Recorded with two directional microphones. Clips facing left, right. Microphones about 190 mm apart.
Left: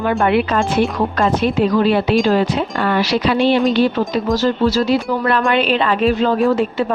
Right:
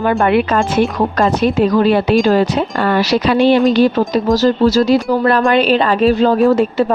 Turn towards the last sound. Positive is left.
turn(degrees=-40)  # may be behind; listen again after turning